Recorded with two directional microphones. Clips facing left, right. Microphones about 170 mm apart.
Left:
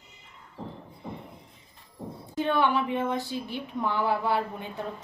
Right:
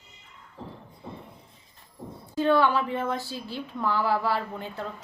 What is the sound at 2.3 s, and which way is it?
A woman's voice, 20° left (ahead or behind).